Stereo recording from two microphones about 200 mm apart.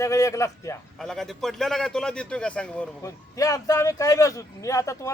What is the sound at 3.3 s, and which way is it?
Speech, 15° left (ahead or behind).